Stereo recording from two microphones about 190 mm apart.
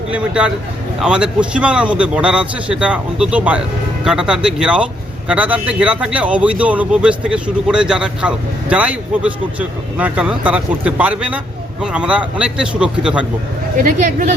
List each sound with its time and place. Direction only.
0.1 s a man's voice: 5° right (ahead or behind)
13.8 s speech: 45° right (ahead or behind)